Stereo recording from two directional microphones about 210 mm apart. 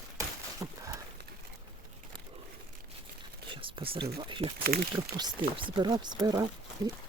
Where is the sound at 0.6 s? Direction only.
15° right (ahead or behind).